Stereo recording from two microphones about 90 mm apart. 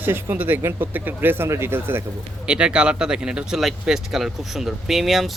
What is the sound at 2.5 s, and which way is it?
Speech, 10° right (ahead or behind).